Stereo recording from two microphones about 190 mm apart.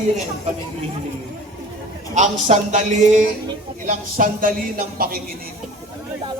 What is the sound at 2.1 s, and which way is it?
Speech, 40° right (ahead or behind).